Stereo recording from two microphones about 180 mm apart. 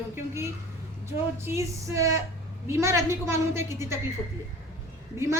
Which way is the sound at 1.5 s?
15° right (ahead or behind).